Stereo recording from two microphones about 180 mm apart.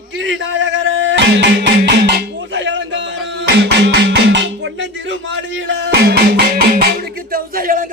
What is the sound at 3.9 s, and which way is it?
Music, 70° right (ahead or behind).